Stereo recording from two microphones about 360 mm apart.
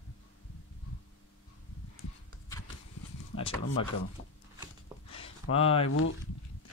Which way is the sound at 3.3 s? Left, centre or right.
Centre.